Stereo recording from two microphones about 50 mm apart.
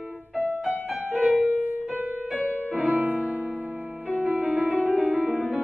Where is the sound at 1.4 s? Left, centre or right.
Right.